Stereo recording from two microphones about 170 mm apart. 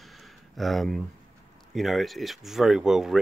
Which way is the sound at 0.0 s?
Centre (ahead or behind).